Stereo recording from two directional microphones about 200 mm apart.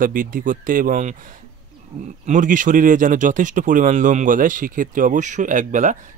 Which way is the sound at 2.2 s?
40° right (ahead or behind).